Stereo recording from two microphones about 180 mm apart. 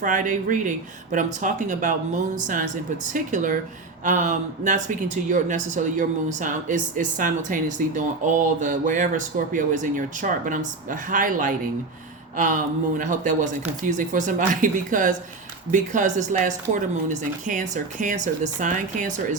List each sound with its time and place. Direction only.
0.0 s speech: 45° right (ahead or behind)
13.0 s speech: 45° right (ahead or behind)